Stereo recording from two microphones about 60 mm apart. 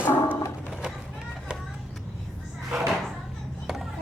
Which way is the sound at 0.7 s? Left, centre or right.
Centre.